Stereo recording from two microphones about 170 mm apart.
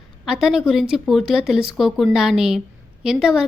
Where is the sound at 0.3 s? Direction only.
Centre (ahead or behind).